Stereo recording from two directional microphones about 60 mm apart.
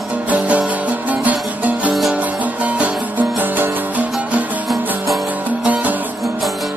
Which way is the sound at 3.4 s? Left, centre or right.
Right.